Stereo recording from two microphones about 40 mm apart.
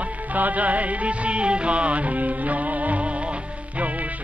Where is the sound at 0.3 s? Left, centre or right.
Right.